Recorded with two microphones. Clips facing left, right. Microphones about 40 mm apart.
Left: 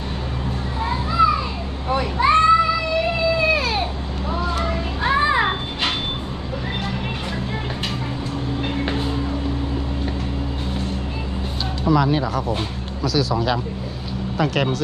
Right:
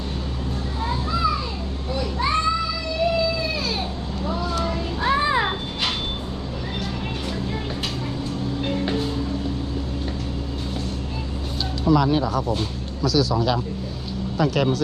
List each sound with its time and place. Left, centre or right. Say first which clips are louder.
0.9 s children playing: left 6 dB; left
1.9 s a sound: left 7 dB; left
3.3 s baby cry: left 6 dB; left
4.3 s a sound: left 2 dB; left
8.6 s music: right 1 dB; left
11.9 s speech: even; centre